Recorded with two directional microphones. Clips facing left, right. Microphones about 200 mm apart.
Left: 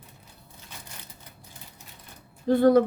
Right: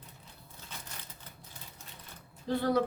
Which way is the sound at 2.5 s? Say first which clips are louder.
Left 10 dB; 50° left (ahead or behind).